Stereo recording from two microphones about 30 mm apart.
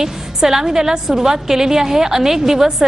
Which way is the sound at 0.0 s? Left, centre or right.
Centre.